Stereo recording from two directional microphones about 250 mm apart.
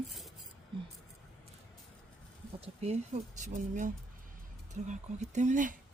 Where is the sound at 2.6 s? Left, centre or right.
Right.